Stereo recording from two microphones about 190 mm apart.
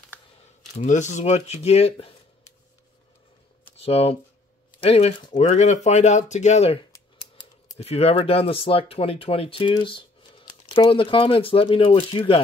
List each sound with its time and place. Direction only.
0.7 s speech: 40° left (ahead or behind)
3.8 s speech: 30° left (ahead or behind)